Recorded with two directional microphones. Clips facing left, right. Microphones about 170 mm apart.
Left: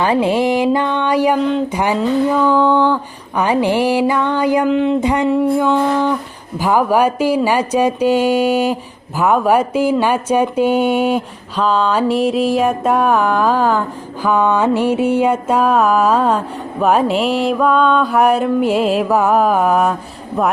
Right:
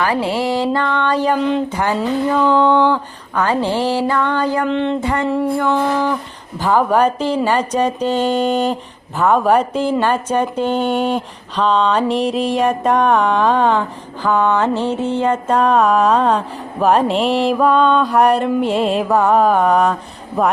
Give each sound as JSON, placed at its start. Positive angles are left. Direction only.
{"t": 0.0, "sound": "mantra", "side_deg": 20}
{"t": 1.4, "sound": "music", "side_deg": 0}
{"t": 1.7, "sound": "mantra", "side_deg": 15}
{"t": 4.9, "sound": "mantra", "side_deg": 15}
{"t": 16.8, "sound": "music", "side_deg": 0}